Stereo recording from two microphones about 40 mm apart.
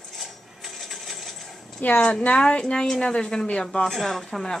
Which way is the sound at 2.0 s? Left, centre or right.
Left.